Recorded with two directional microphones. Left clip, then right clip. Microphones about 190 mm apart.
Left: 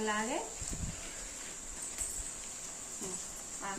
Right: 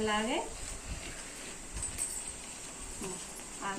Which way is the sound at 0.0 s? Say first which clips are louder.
Right 3 dB; 15° left (ahead or behind).